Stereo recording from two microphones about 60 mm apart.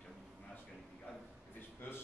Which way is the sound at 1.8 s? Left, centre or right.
Left.